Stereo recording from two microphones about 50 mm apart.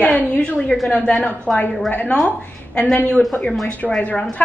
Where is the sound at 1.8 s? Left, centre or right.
Left.